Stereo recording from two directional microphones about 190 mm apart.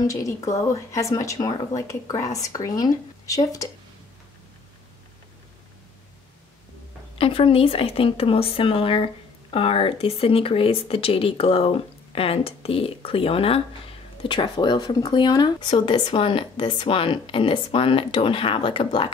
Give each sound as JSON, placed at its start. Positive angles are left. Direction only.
{"t": 0.0, "sound": "speech", "side_deg": 15}
{"t": 7.2, "sound": "speech", "side_deg": 30}